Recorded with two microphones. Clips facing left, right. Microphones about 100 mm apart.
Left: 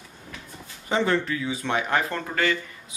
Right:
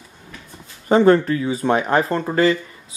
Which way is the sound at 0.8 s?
45° right (ahead or behind).